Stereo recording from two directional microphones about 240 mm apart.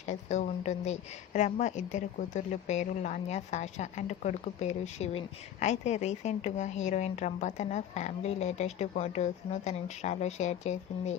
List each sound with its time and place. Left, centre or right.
0.1 s a woman's voice: left